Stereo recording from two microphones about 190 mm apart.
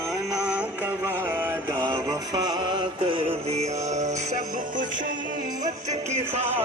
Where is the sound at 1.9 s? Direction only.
20° right (ahead or behind); by 4.4 s 35° right (ahead or behind).